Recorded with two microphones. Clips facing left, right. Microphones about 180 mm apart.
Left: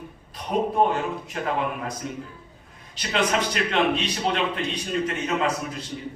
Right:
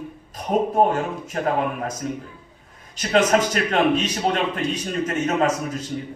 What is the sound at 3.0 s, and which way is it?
A man's voice, 45° right (ahead or behind).